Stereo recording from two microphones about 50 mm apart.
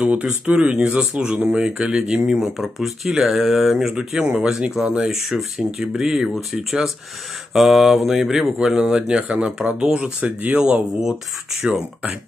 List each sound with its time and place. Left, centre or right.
0.0 s speech: right
0.6 s speech: centre
2.4 s speech: centre
5.1 s speech: centre